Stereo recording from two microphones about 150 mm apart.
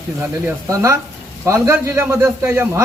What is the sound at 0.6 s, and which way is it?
Speech, 20° right (ahead or behind).